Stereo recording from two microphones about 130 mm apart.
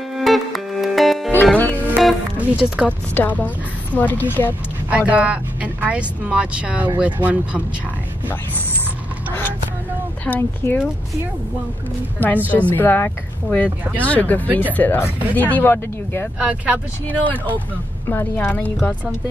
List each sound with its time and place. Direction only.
0.2 s music: centre (ahead or behind)
1.3 s music: 15° left (ahead or behind)
2.3 s speech: 10° right (ahead or behind)
3.2 s speech: 10° left (ahead or behind)
4.8 s speech: 10° right (ahead or behind)
10.2 s speech: 15° left (ahead or behind)
12.4 s speech: 10° left (ahead or behind)
14.5 s speech: 15° right (ahead or behind)
14.8 s speech: 15° left (ahead or behind)
16.3 s speech: 10° right (ahead or behind)
17.1 s speech: 10° left (ahead or behind)